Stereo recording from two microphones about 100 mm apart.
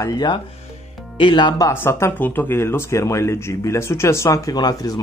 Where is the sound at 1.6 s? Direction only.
25° left (ahead or behind).